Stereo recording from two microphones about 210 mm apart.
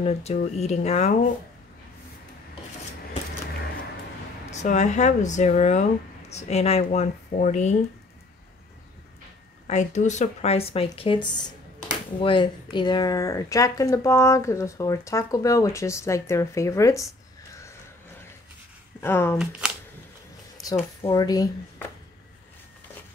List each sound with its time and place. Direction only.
0.0 s speech: 30° left (ahead or behind)
4.5 s speech: 35° left (ahead or behind)
9.7 s speech: 35° left (ahead or behind); by 17.1 s 15° left (ahead or behind)
18.9 s speech: 10° left (ahead or behind)
19.3 s speech: 5° right (ahead or behind)
21.0 s speech: 20° left (ahead or behind)